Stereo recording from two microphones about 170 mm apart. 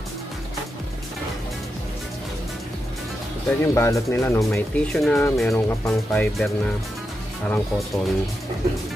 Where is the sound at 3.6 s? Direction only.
15° left (ahead or behind).